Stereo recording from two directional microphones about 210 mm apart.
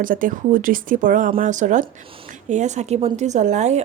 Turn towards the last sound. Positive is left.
turn(degrees=-35)  # may be behind; listen again after turning